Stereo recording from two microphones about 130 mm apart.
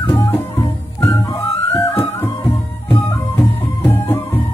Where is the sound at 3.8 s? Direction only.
15° left (ahead or behind).